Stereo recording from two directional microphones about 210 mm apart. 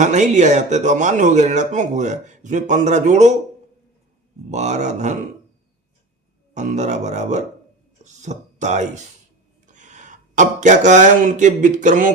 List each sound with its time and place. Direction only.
0.0 s speech: 35° right (ahead or behind)
4.5 s speech: 35° right (ahead or behind)
6.5 s speech: 35° right (ahead or behind)